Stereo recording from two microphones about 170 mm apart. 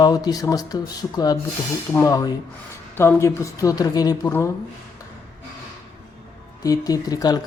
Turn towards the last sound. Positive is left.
turn(degrees=20)  # may be behind; listen again after turning